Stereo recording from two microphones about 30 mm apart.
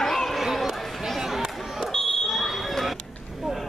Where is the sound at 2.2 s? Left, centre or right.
Centre.